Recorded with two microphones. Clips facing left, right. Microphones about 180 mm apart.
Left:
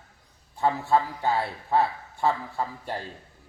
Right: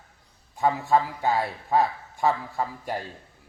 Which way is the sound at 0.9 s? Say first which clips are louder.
Right 1 dB; 10° right (ahead or behind).